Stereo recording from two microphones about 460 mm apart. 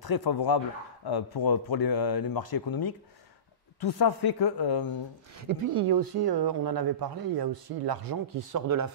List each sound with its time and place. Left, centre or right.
0.0 s speech: left
5.7 s speech: right